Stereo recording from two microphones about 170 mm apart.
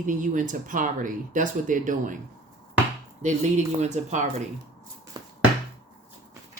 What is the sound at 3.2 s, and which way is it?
Speech, 45° right (ahead or behind).